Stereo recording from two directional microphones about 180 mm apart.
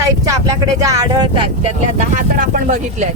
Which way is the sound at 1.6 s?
45° right (ahead or behind).